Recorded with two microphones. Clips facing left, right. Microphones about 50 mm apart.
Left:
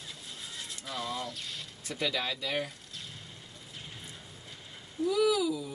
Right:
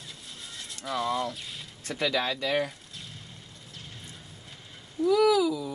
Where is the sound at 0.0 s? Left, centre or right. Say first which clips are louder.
Even; centre.